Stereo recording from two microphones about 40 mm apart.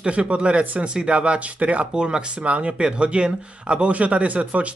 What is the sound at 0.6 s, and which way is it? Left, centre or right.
Speech, right.